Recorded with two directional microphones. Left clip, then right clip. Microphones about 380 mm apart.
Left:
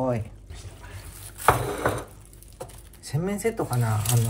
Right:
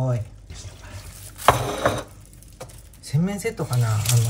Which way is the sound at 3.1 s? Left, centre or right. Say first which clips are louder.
Even; centre.